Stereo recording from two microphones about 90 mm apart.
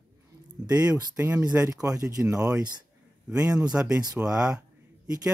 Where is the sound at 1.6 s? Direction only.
40° right (ahead or behind).